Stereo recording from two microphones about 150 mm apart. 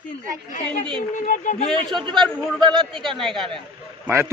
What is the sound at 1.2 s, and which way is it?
Speech, 55° left (ahead or behind).